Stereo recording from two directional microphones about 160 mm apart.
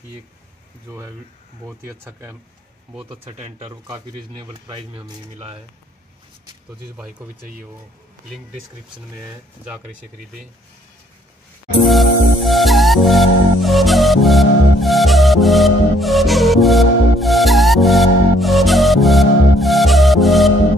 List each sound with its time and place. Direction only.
0.8 s speech: 15° right (ahead or behind)
3.3 s speech: 40° right (ahead or behind)
3.8 s speech: 25° right (ahead or behind)
11.8 s music: centre (ahead or behind)